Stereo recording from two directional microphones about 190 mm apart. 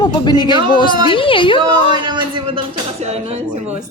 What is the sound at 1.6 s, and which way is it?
Speech, 25° right (ahead or behind).